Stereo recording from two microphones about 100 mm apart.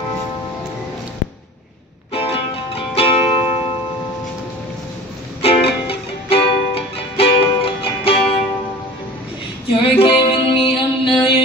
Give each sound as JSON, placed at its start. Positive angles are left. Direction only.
{"t": 2.1, "sound": "music", "side_deg": 75}
{"t": 5.4, "sound": "music", "side_deg": 75}
{"t": 9.9, "sound": "music", "side_deg": 65}